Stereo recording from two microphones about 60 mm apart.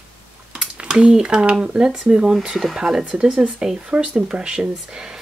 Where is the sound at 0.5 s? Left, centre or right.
Centre.